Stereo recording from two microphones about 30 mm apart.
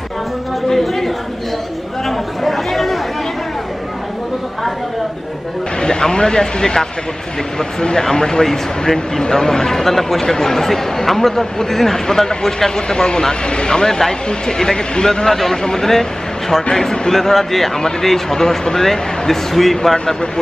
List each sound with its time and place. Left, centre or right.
0.7 s chatter: centre
5.8 s speech: left
15.2 s speech: centre
17.1 s speech: centre